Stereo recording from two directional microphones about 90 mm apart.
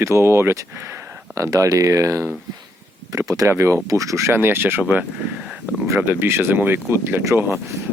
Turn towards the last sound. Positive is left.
turn(degrees=-30)  # may be behind; listen again after turning